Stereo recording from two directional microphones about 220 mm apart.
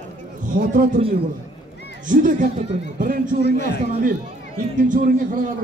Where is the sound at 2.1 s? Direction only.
35° right (ahead or behind).